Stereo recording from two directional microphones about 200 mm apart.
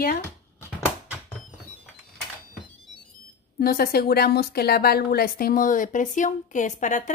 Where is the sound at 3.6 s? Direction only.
50° left (ahead or behind).